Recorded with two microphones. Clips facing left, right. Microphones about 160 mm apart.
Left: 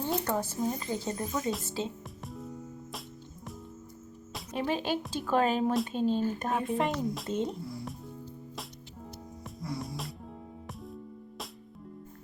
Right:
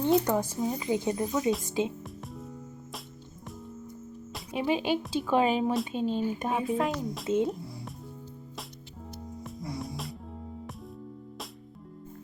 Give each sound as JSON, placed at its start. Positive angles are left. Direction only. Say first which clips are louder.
{"t": 0.3, "sound": "speech", "louder": "right 2 dB", "side_deg": -15}
{"t": 2.2, "sound": "music", "louder": "left 4 dB", "side_deg": 0}
{"t": 4.4, "sound": "speech", "louder": "right 3 dB", "side_deg": -10}
{"t": 9.4, "sound": "music", "louder": "even", "side_deg": 0}